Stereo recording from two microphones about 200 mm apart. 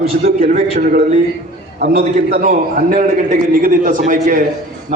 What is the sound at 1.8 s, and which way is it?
A man's voice, 50° right (ahead or behind).